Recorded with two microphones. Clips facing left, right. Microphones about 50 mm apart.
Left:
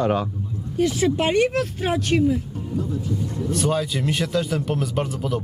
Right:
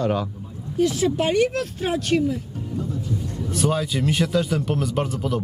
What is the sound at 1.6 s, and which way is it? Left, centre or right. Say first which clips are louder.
Speech: left 1 dB; centre.